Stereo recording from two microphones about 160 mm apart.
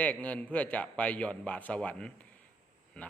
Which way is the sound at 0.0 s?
10° left (ahead or behind).